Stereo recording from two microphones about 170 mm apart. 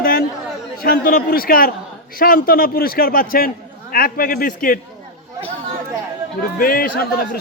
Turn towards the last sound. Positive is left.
turn(degrees=60)  # may be behind; listen again after turning